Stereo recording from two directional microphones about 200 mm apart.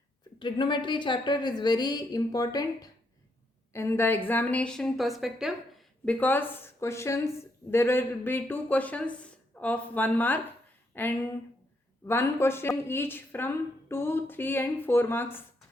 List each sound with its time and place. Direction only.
0.3 s a woman's voice: 25° left (ahead or behind)